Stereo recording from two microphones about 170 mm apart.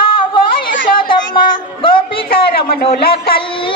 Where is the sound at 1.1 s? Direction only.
30° left (ahead or behind).